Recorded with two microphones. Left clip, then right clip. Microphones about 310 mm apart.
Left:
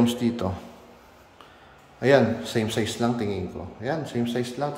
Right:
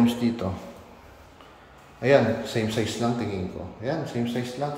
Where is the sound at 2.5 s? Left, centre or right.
Centre.